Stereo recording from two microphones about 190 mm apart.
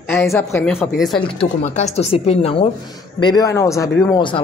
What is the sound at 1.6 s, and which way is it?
A woman's voice, 40° left (ahead or behind).